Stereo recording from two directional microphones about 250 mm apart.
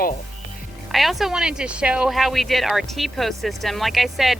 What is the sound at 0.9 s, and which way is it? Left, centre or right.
Speech, centre.